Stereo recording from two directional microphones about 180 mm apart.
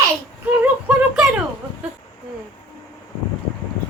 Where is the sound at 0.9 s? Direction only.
5° right (ahead or behind).